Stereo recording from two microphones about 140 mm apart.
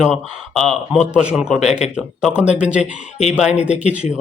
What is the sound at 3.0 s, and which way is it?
Speech, 55° left (ahead or behind).